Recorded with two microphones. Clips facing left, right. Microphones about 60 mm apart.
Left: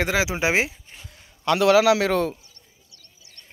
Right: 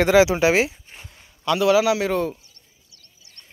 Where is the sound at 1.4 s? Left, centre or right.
Left.